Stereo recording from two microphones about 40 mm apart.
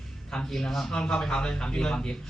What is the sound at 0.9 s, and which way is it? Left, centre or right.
Speech, left.